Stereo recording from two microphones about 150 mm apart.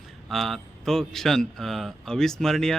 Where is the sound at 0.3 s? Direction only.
Centre (ahead or behind).